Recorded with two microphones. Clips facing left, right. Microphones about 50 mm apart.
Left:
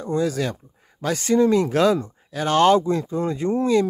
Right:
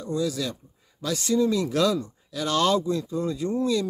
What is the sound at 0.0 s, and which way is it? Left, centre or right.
Speech, left.